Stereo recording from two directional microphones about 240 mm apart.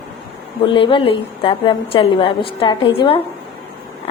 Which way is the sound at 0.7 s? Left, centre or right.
Left.